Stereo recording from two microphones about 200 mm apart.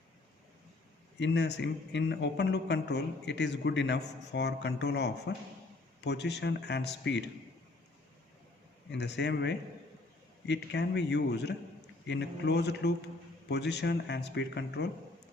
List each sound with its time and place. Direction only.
1.2 s a man's voice: 60° left (ahead or behind)
8.9 s a man's voice: 60° left (ahead or behind)